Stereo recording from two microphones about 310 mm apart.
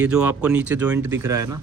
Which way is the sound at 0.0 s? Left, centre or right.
Centre.